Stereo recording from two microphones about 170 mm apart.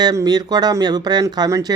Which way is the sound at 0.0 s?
20° right (ahead or behind).